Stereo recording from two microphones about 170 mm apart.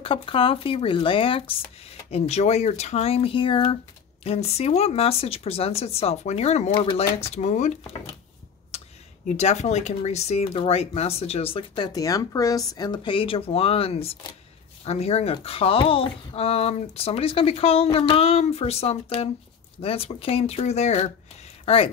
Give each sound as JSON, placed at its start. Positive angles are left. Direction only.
{"t": 0.0, "sound": "speech", "side_deg": 30}
{"t": 9.4, "sound": "speech", "side_deg": 40}